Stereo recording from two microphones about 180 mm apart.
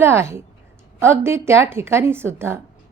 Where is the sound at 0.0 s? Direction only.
15° right (ahead or behind).